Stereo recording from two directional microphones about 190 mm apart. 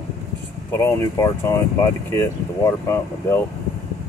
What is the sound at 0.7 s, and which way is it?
Speech, 15° left (ahead or behind).